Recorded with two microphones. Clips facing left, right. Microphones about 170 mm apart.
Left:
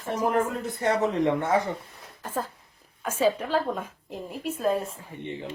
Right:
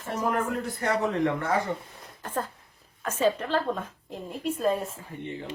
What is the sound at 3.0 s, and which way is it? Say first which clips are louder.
A woman's voice: left 1 dB; 10° left (ahead or behind).